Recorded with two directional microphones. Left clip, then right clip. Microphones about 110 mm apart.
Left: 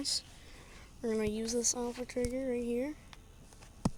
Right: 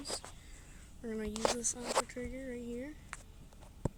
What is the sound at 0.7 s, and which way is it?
Speech, 25° left (ahead or behind).